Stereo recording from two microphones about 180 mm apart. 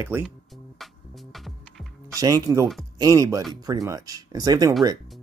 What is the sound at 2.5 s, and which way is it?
Speech, 15° right (ahead or behind).